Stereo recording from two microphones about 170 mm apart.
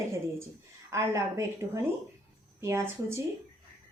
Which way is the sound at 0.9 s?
15° right (ahead or behind).